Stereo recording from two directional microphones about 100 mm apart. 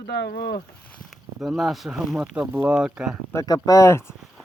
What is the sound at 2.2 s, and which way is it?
Speech, 15° right (ahead or behind).